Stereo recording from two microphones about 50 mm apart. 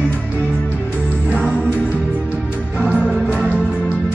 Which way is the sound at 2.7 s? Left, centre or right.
Right.